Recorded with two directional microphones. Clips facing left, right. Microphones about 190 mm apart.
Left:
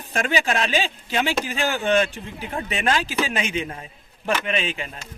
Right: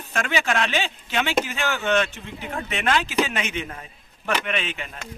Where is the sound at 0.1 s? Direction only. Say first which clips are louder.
Left 2 dB; 35° left (ahead or behind).